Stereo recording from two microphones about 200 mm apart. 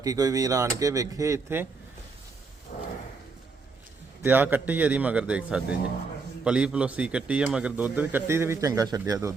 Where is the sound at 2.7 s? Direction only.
40° left (ahead or behind).